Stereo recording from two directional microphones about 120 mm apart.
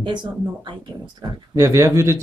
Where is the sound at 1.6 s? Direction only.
25° right (ahead or behind).